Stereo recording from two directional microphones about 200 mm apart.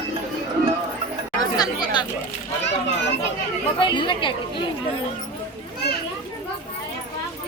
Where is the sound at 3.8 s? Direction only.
25° left (ahead or behind).